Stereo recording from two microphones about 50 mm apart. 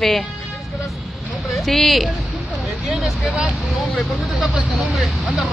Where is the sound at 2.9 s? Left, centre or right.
Centre.